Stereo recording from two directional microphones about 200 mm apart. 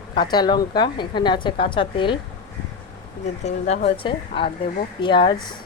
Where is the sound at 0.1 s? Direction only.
20° left (ahead or behind).